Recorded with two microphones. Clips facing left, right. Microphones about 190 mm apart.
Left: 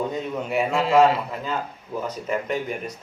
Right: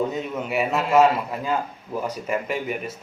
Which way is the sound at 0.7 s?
25° left (ahead or behind).